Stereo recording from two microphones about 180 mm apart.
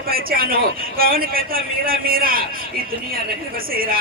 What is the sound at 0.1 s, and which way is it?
A man's voice, 55° right (ahead or behind).